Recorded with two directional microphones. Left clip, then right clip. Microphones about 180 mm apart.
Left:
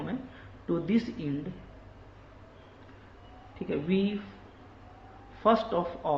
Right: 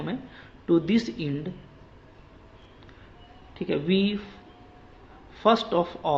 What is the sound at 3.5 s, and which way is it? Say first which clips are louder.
Speech: right 5 dB; 40° right (ahead or behind).